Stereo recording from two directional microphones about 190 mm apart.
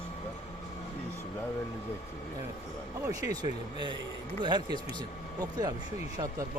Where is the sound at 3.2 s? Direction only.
20° right (ahead or behind).